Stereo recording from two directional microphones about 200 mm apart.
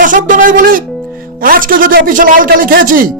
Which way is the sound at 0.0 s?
40° right (ahead or behind).